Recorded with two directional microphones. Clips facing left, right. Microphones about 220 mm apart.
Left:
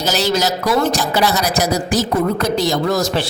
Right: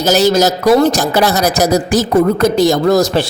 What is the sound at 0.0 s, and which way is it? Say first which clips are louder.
Speech: right 7 dB; 45° right (ahead or behind).